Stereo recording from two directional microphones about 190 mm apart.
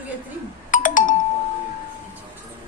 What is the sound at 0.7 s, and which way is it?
Doorbell, 45° left (ahead or behind).